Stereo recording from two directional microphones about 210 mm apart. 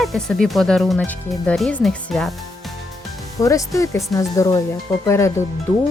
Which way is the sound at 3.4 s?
15° left (ahead or behind).